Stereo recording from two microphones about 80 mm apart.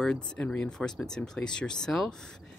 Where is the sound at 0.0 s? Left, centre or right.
Centre.